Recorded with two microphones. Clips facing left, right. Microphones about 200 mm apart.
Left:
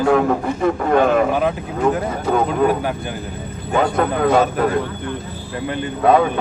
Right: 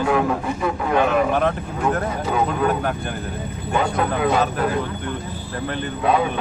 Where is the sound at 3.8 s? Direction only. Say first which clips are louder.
Left 4 dB; 50° left (ahead or behind).